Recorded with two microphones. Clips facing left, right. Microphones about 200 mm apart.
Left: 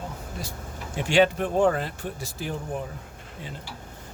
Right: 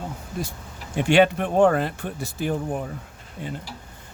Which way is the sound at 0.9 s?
60° right (ahead or behind).